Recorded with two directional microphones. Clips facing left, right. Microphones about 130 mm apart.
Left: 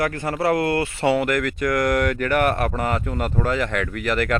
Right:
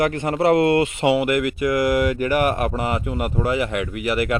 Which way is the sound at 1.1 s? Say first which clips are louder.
Right 2 dB; 10° right (ahead or behind).